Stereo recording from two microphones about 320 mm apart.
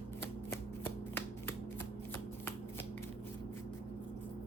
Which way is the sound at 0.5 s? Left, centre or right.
Centre.